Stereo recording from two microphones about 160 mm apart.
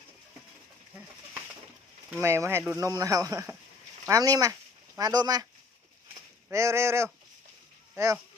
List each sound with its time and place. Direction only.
2.0 s speech: 15° right (ahead or behind)
6.5 s speech: 20° right (ahead or behind)